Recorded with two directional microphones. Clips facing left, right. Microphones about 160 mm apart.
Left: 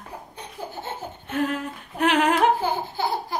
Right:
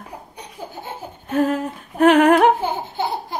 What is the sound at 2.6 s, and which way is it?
Laughter, 20° right (ahead or behind).